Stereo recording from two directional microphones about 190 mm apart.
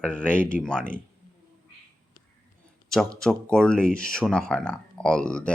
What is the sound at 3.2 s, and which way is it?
Speech, 5° left (ahead or behind).